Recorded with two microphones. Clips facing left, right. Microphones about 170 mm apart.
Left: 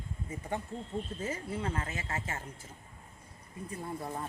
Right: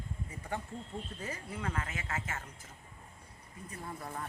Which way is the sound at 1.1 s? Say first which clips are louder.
Left 5 dB; 25° left (ahead or behind).